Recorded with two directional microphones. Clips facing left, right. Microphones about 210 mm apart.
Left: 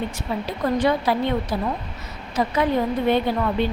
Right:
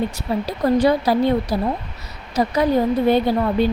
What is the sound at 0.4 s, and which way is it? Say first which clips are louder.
Speech: right 4 dB; 35° right (ahead or behind).